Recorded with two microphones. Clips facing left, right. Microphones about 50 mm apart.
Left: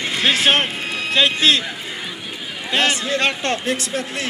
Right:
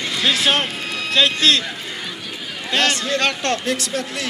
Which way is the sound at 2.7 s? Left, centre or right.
Centre.